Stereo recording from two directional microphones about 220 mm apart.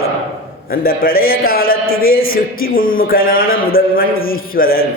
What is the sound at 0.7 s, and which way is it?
A man's voice, 40° left (ahead or behind).